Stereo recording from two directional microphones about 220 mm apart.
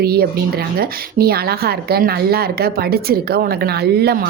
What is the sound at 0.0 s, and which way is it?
Speech, 45° right (ahead or behind).